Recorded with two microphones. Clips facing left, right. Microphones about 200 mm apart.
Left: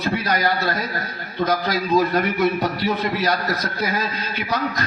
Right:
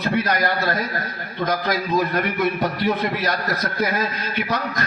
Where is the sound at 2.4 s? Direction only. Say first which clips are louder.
Left 1 dB; 50° right (ahead or behind).